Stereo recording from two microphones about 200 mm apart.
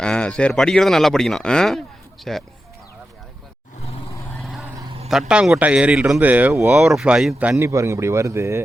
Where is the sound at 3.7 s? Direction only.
30° left (ahead or behind).